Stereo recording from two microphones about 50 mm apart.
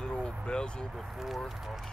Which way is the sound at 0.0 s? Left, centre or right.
Centre.